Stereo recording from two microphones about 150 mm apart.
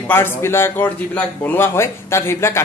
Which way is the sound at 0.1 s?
15° left (ahead or behind).